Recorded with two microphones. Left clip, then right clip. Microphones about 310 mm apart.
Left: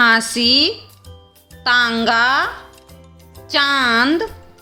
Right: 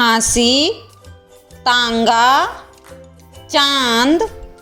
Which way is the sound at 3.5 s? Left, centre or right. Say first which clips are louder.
Right 1 dB; centre.